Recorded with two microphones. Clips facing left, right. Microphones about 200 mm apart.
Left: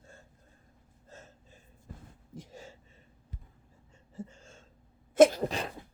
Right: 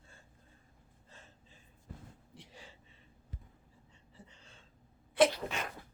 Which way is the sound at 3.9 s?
45° left (ahead or behind).